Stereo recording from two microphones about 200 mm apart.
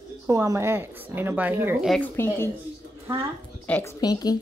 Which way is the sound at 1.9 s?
10° left (ahead or behind).